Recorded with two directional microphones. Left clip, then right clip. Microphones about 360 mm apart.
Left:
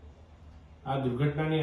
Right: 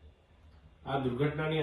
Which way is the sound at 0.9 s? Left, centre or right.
Centre.